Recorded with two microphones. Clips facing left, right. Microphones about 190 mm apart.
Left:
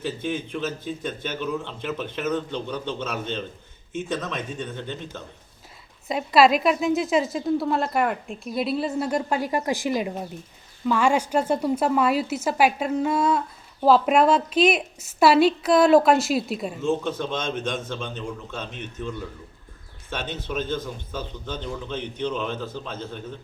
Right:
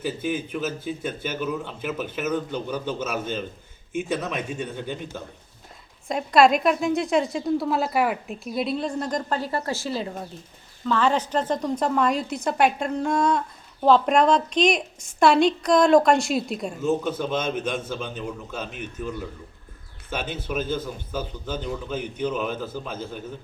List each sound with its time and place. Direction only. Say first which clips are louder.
0.0 s a man's voice: right 1 dB; 5° right (ahead or behind)
6.1 s a woman's voice: even; 5° left (ahead or behind)